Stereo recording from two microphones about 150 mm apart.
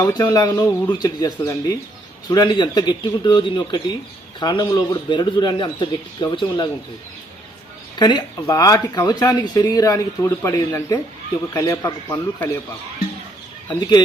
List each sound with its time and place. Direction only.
0.0 s speech: 25° left (ahead or behind)
7.9 s speech: 30° left (ahead or behind)